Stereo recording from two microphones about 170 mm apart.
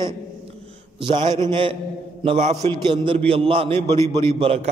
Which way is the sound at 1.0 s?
25° right (ahead or behind).